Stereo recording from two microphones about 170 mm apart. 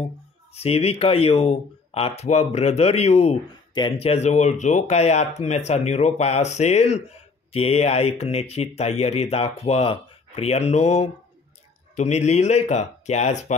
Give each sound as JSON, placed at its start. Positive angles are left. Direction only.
{"t": 0.6, "sound": "speech", "side_deg": 35}